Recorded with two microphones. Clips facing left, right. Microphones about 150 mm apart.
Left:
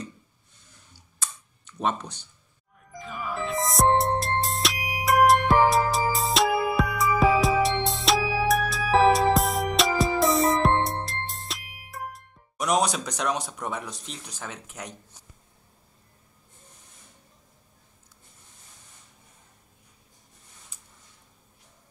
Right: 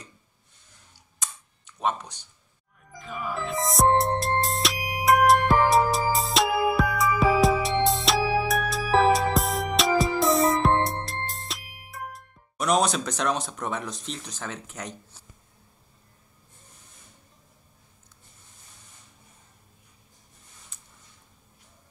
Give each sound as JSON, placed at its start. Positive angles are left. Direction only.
{"t": 1.2, "sound": "computer keyboard", "side_deg": -15}
{"t": 1.8, "sound": "speech", "side_deg": -10}
{"t": 2.9, "sound": "music", "side_deg": 0}
{"t": 12.5, "sound": "speech", "side_deg": 15}
{"t": 20.7, "sound": "a sound", "side_deg": 10}